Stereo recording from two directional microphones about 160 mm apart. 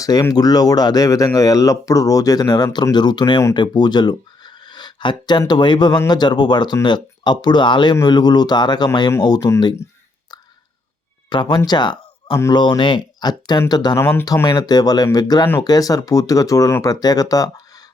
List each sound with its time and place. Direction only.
0.0 s speech: 20° left (ahead or behind)
11.3 s speech: 25° left (ahead or behind)